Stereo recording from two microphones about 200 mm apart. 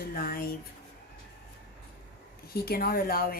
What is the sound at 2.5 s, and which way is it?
Speech, 50° left (ahead or behind).